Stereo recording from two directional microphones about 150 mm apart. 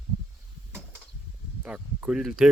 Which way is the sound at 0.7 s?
15° right (ahead or behind).